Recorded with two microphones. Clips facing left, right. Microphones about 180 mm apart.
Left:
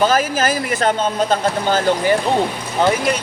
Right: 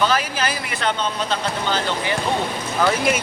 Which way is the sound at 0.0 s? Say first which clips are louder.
Left 5 dB; 45° left (ahead or behind).